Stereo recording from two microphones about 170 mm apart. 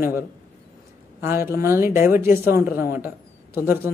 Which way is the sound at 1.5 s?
15° right (ahead or behind).